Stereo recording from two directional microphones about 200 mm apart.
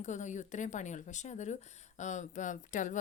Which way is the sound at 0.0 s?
35° left (ahead or behind).